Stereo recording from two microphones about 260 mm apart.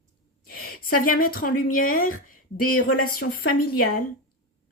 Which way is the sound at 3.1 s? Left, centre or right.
Left.